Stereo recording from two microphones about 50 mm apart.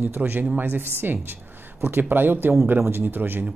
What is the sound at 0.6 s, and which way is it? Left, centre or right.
Speech, right.